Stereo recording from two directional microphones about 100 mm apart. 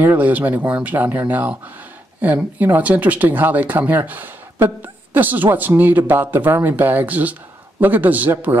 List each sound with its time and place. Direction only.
0.0 s speech: 15° right (ahead or behind)